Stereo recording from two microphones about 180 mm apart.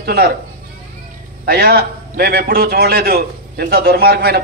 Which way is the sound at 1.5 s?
60° right (ahead or behind).